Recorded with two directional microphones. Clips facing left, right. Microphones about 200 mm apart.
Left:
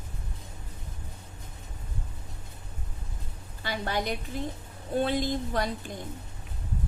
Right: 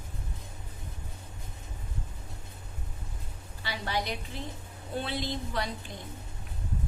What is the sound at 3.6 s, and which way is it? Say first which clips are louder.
Speech: left 3 dB; 50° left (ahead or behind).